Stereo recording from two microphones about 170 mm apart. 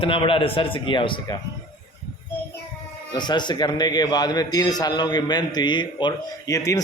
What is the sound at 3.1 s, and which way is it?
A man's voice, 25° left (ahead or behind).